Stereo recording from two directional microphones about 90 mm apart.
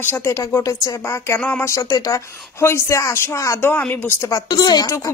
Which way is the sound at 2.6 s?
30° left (ahead or behind).